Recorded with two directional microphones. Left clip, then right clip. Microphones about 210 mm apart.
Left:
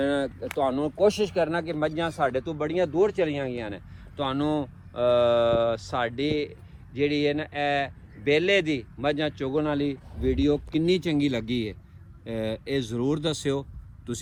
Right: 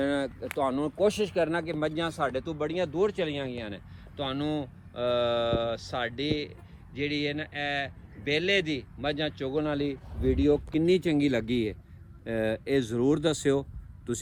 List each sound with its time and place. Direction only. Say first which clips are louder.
0.0 s speech: left 3 dB; 30° left (ahead or behind)
10.7 s speech: even; 15° left (ahead or behind); by 14.2 s centre (ahead or behind)